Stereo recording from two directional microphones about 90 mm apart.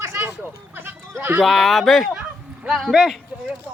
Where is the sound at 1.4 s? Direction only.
Centre (ahead or behind).